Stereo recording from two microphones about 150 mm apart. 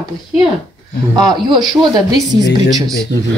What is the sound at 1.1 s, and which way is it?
A woman's voice, 25° right (ahead or behind).